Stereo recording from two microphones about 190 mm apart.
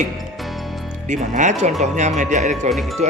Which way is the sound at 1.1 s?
40° right (ahead or behind).